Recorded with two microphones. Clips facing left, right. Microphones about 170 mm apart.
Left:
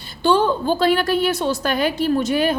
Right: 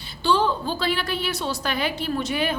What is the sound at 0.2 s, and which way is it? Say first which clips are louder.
A woman's voice: left 5 dB; 50° left (ahead or behind).